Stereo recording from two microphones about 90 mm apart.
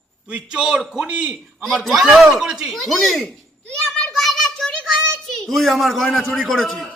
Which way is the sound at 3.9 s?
5° left (ahead or behind).